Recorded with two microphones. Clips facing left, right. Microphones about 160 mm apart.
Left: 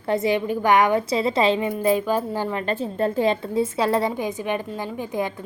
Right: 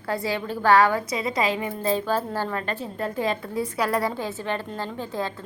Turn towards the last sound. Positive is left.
turn(degrees=15)  # may be behind; listen again after turning